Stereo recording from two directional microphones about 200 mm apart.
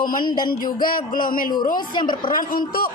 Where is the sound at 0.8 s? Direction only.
45° left (ahead or behind).